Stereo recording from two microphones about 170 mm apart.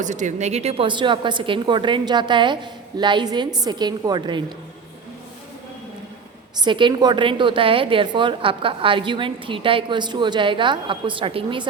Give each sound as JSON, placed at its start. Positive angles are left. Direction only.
{"t": 0.0, "sound": "a woman's voice", "side_deg": -45}
{"t": 6.6, "sound": "a woman's voice", "side_deg": -30}